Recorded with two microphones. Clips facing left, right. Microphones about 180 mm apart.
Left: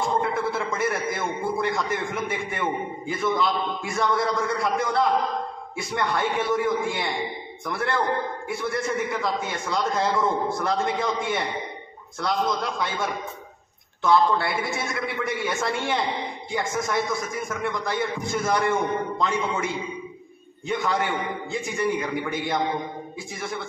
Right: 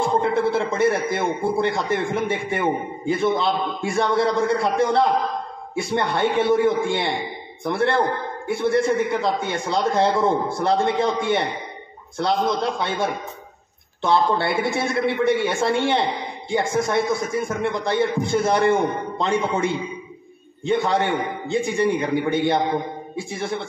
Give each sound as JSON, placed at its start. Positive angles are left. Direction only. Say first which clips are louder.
{"t": 0.2, "sound": "a man's voice", "louder": "right 6 dB", "side_deg": -30}